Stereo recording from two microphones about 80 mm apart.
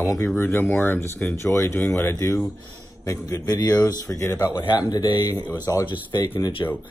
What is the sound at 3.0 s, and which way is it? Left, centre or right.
Speech, left.